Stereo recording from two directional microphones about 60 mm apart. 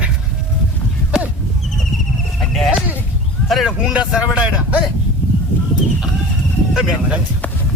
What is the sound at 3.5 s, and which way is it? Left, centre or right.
Speech, centre.